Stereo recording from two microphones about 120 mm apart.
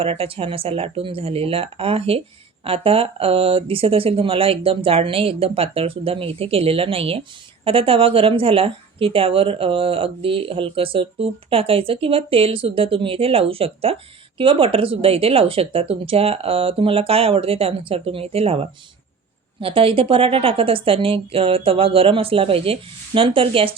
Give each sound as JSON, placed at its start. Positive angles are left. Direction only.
{"t": 0.0, "sound": "a woman's voice", "side_deg": -50}